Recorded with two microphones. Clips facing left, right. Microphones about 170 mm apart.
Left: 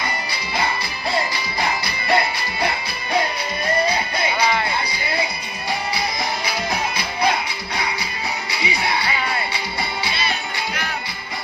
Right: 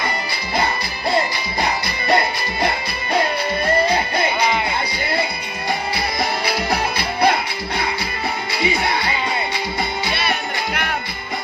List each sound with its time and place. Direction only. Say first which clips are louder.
6.4 s music: right 3 dB; 60° right (ahead or behind)
8.5 s music: right 6 dB; 50° right (ahead or behind)
10.1 s music: right 3 dB; 60° right (ahead or behind)